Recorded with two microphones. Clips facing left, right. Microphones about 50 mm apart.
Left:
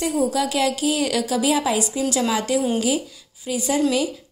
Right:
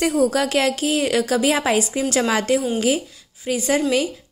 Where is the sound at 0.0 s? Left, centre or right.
Right.